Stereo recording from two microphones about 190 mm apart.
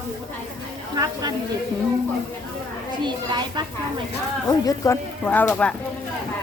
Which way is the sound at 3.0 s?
25° right (ahead or behind).